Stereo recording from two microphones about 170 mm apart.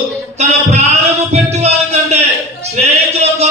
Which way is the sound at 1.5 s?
40° right (ahead or behind).